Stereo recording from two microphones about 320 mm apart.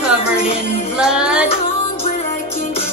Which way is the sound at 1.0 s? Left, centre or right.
Centre.